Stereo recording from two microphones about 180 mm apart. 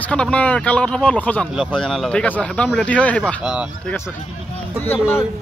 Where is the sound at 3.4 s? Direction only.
5° right (ahead or behind).